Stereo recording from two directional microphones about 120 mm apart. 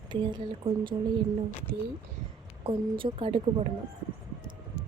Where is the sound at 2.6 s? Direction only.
45° right (ahead or behind).